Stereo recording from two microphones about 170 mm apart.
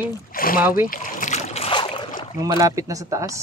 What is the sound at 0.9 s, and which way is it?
Boat, 50° left (ahead or behind).